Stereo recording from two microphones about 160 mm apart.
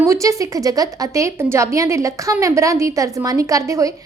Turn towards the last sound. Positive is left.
turn(degrees=-20)  # may be behind; listen again after turning